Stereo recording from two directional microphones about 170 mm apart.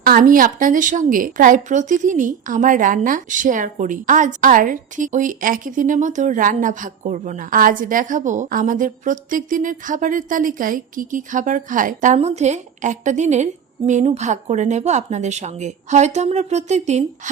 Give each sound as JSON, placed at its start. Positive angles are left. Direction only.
{"t": 0.0, "sound": "speech", "side_deg": -55}